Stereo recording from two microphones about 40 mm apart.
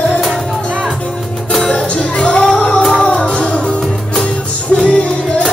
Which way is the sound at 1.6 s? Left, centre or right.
Left.